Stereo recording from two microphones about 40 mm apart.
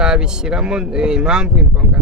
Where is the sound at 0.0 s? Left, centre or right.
Centre.